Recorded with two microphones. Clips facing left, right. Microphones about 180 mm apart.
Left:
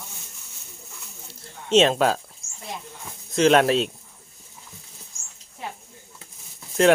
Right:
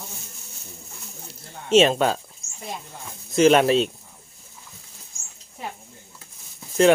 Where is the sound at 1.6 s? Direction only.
5° right (ahead or behind).